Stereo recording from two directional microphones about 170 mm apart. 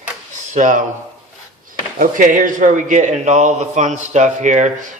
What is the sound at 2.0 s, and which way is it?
Speech, 50° right (ahead or behind).